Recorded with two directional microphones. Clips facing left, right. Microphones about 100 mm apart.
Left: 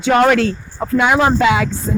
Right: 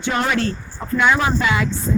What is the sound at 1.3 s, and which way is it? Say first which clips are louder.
Speech: left 6 dB; 90° left.